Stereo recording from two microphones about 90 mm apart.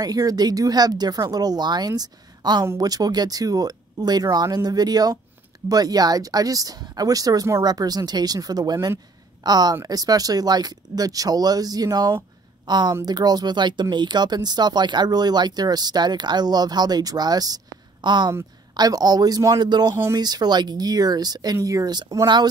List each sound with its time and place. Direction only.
0.0 s speech: 45° right (ahead or behind)